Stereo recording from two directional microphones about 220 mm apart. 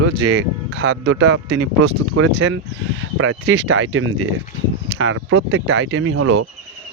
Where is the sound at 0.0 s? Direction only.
55° right (ahead or behind).